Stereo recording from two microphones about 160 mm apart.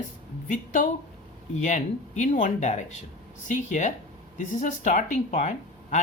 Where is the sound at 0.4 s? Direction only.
50° left (ahead or behind).